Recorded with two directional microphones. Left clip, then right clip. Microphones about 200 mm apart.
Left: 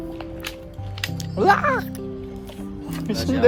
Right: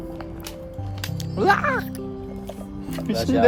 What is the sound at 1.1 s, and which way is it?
Speech, 5° right (ahead or behind).